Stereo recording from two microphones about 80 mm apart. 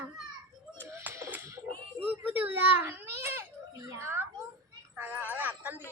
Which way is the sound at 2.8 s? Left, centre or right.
Right.